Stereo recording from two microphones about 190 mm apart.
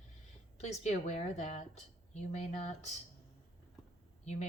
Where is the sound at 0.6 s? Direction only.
35° left (ahead or behind).